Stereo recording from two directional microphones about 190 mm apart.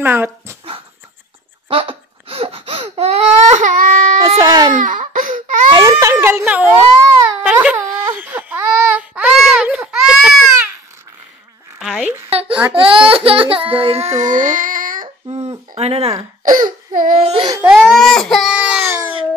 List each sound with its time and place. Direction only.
0.0 s speech: 10° right (ahead or behind)
1.7 s baby cry: 30° right (ahead or behind); by 4.0 s 45° right (ahead or behind)
4.4 s baby cry: 20° right (ahead or behind)
4.7 s a sound: 45° right (ahead or behind)
5.7 s baby cry: 20° right (ahead or behind); by 10.7 s 5° right (ahead or behind)
11.8 s zipper: centre (ahead or behind)
12.3 s babbling: 30° right (ahead or behind)
12.7 s speech: 30° right (ahead or behind); by 15.0 s 45° right (ahead or behind)
15.2 s a sound: 30° right (ahead or behind)
16.4 s a sound: 45° right (ahead or behind)
17.5 s baby cry: 10° right (ahead or behind)